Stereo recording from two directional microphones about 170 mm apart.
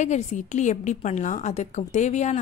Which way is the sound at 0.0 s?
45° left (ahead or behind).